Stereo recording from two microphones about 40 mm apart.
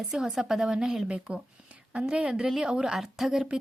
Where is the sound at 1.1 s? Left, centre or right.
Right.